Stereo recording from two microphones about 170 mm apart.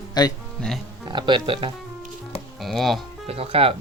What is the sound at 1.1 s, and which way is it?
Speech, 25° right (ahead or behind).